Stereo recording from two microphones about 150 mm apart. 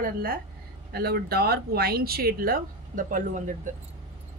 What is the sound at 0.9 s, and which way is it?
Speech, 90° right.